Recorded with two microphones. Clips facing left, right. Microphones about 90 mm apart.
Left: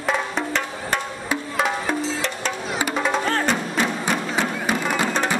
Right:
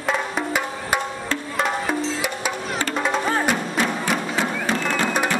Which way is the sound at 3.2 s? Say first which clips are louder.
Right 1 dB; 10° right (ahead or behind).